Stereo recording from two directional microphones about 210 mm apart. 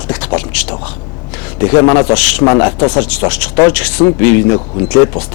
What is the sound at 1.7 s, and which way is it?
Speech, 15° left (ahead or behind).